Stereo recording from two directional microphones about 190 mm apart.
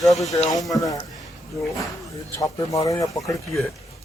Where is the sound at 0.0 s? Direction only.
Centre (ahead or behind).